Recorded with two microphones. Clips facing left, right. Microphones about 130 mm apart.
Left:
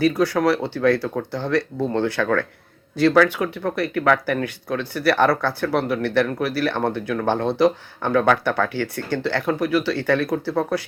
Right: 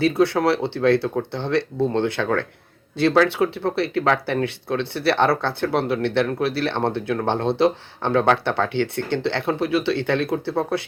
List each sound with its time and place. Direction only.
0.0 s speech: 25° right (ahead or behind)